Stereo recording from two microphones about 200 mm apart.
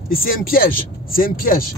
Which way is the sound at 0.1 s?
45° left (ahead or behind).